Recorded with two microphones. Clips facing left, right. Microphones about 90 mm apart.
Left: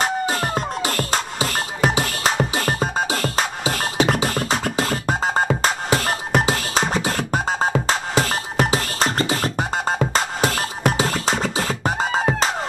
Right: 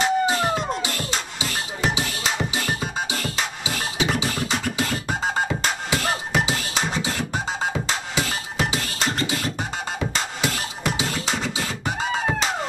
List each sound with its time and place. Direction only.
0.0 s music: 45° left (ahead or behind)